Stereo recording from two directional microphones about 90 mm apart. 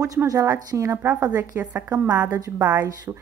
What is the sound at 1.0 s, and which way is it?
A woman's voice, 25° right (ahead or behind).